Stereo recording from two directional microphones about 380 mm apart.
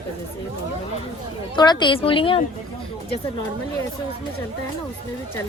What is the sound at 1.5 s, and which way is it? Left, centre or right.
Speech, centre.